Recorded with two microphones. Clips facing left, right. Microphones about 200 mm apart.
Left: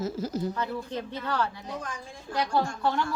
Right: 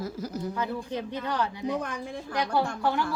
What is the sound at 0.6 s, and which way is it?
Speech, 15° right (ahead or behind).